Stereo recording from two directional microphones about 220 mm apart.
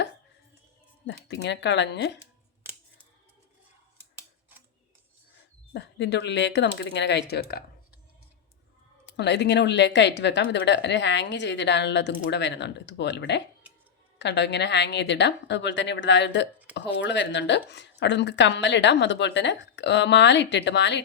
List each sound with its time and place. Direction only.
1.0 s speech: 55° left (ahead or behind)
5.7 s speech: 50° left (ahead or behind)
9.0 s speech: 50° left (ahead or behind)